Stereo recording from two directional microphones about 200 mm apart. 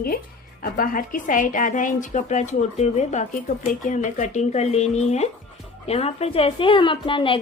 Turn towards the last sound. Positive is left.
turn(degrees=25)  # may be behind; listen again after turning